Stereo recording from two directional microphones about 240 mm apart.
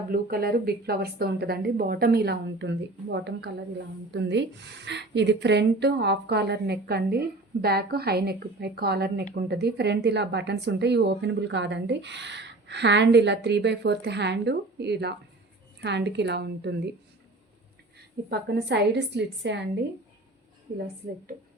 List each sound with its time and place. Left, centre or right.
0.1 s a woman's voice: right
18.3 s a woman's voice: right